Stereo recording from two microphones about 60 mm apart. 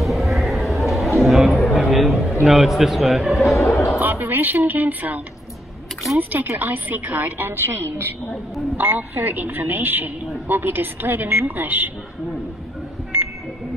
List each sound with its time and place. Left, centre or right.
0.0 s a sound: centre
2.4 s a man's voice: centre
3.7 s speech: left
4.0 s speech: right